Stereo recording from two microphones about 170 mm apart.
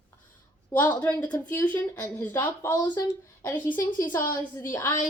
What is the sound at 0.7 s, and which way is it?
Speech, 10° left (ahead or behind).